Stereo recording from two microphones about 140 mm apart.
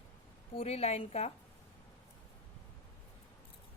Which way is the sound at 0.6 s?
50° left (ahead or behind).